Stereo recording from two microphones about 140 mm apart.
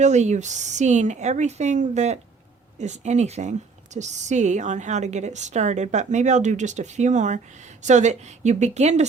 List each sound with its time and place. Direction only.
0.0 s a woman's voice: 55° right (ahead or behind)